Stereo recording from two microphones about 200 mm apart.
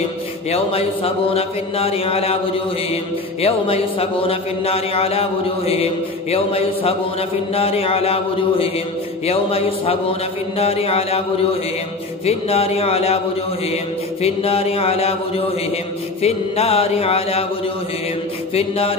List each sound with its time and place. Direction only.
0.5 s speech: 30° left (ahead or behind)
6.3 s speech: 30° left (ahead or behind)
12.3 s speech: 30° left (ahead or behind)
14.2 s speech: 30° left (ahead or behind)
18.5 s speech: 30° left (ahead or behind)